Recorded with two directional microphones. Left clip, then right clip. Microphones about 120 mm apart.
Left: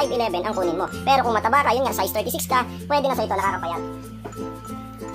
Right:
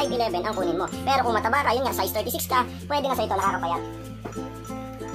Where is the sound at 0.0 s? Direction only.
40° left (ahead or behind).